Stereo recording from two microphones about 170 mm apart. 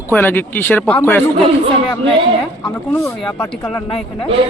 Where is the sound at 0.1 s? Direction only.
10° left (ahead or behind).